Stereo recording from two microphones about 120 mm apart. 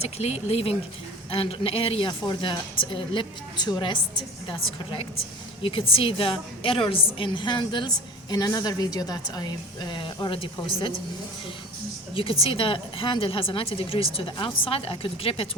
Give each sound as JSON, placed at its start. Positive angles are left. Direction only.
{"t": 0.0, "sound": "a woman's voice", "side_deg": 60}
{"t": 5.6, "sound": "a woman's voice", "side_deg": 50}
{"t": 12.1, "sound": "a woman's voice", "side_deg": 50}